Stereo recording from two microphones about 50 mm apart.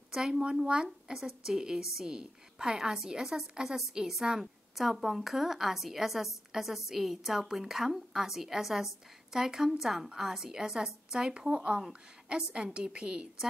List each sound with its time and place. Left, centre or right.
0.1 s a woman's voice: centre